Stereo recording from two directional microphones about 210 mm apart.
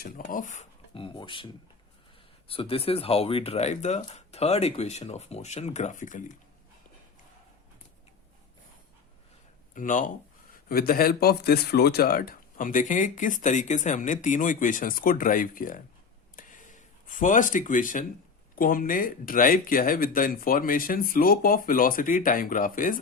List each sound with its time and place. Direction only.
0.0 s speech: 40° left (ahead or behind); by 1.5 s 25° left (ahead or behind)
2.5 s speech: 25° left (ahead or behind)
9.7 s speech: 40° left (ahead or behind)
16.3 s a sound: 40° left (ahead or behind)
18.5 s speech: 40° left (ahead or behind)